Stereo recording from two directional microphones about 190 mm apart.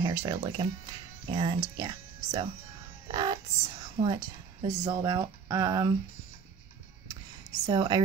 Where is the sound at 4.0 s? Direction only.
35° right (ahead or behind).